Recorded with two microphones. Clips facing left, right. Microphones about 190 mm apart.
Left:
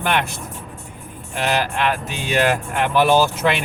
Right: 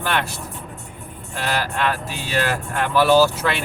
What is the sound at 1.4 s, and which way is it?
Speech, 20° left (ahead or behind).